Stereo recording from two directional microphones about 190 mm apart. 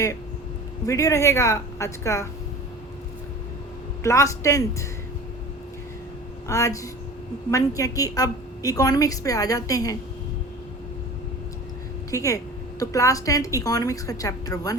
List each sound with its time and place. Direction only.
0.9 s a woman's voice: 15° left (ahead or behind)
4.0 s a woman's voice: 15° left (ahead or behind)
6.5 s a woman's voice: 15° left (ahead or behind)
12.1 s a woman's voice: 15° left (ahead or behind)